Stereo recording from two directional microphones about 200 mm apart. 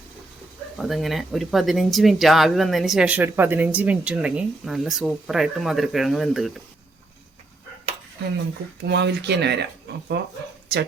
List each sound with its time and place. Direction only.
0.8 s speech: centre (ahead or behind)
8.8 s speech: 60° right (ahead or behind)